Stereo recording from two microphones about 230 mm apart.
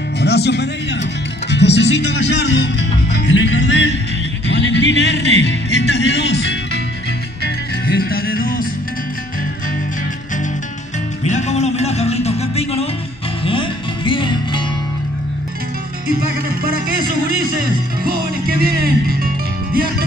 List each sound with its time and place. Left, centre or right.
0.2 s speech: left
7.4 s music: left
11.2 s music: left
16.4 s music: right